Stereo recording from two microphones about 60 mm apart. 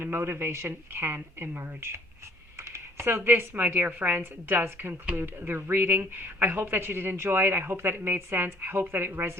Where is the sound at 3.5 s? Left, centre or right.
Right.